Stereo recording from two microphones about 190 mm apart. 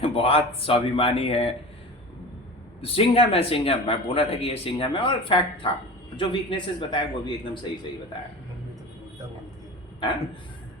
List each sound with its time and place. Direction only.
0.0 s speech: 30° left (ahead or behind)
2.8 s speech: 30° left (ahead or behind)